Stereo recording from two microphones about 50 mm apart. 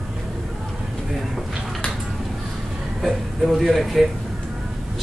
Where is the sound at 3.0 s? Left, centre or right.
Centre.